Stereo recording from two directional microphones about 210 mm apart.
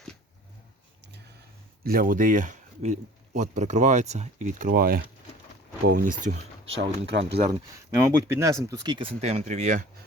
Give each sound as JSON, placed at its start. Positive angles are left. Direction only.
{"t": 1.8, "sound": "speech", "side_deg": -45}
{"t": 6.7, "sound": "speech", "side_deg": -65}
{"t": 7.7, "sound": "speech", "side_deg": -15}